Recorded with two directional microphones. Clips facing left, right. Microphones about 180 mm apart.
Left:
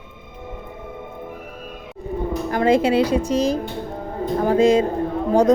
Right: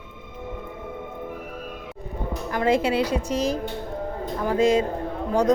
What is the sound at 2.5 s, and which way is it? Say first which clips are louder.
Speech: left 4 dB; 25° left (ahead or behind).